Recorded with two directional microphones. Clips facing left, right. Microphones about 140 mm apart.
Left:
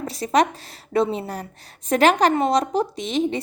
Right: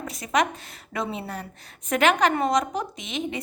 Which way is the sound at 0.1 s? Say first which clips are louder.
Left 5 dB; 35° left (ahead or behind).